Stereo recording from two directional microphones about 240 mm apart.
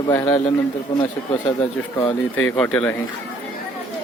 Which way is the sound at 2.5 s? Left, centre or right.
Centre.